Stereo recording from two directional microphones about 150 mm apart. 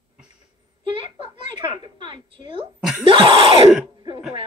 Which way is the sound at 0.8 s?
35° right (ahead or behind).